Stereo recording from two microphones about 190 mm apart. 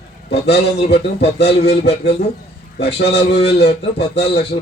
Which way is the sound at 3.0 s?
60° left (ahead or behind).